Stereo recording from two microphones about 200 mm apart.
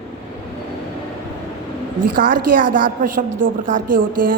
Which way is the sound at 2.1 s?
45° right (ahead or behind).